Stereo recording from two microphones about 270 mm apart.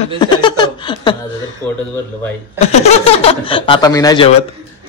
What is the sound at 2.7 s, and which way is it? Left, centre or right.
Speech, left.